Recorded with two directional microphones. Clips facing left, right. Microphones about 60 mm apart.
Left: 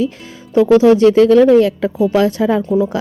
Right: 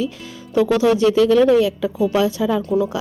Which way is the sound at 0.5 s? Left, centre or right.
Left.